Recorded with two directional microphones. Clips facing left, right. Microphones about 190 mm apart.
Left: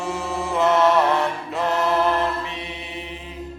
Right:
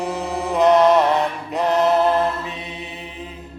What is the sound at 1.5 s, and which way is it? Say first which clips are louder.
Chant: right 5 dB; 20° right (ahead or behind).